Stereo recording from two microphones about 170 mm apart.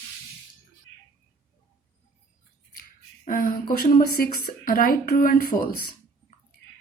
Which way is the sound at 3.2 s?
55° left (ahead or behind).